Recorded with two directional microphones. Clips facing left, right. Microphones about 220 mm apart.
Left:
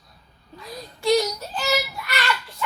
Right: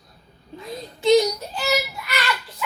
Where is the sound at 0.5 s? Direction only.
25° right (ahead or behind).